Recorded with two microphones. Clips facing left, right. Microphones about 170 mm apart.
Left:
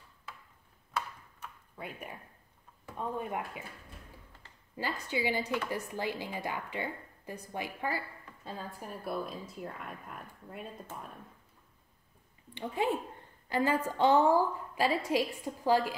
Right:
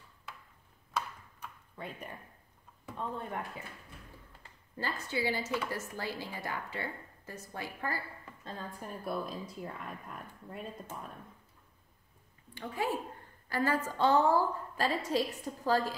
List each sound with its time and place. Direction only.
0.9 s tick-tock: 5° left (ahead or behind)
3.2 s a woman's voice: 10° left (ahead or behind)
4.7 s a woman's voice: 15° left (ahead or behind)
13.5 s a woman's voice: 20° left (ahead or behind)